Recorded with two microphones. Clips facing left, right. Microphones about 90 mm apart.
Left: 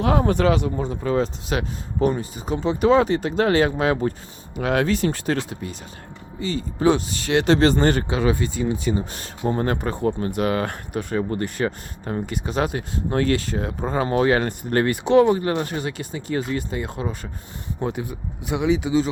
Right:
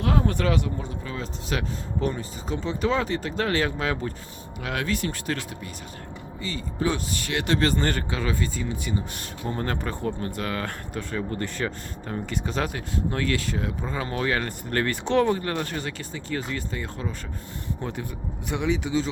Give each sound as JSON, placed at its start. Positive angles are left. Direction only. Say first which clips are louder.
{"t": 0.4, "sound": "speech", "louder": "left 5 dB", "side_deg": 20}
{"t": 0.8, "sound": "speech", "louder": "left 11 dB", "side_deg": 45}
{"t": 1.2, "sound": "speech", "louder": "left 6 dB", "side_deg": 20}
{"t": 8.6, "sound": "speech", "louder": "left 7 dB", "side_deg": 35}
{"t": 12.6, "sound": "speech", "louder": "left 3 dB", "side_deg": 30}